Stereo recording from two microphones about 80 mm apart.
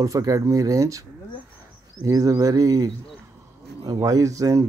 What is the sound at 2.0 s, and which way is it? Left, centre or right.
Speech, right.